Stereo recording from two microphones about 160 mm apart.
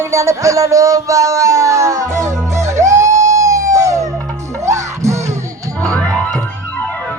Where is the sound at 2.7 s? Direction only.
20° right (ahead or behind).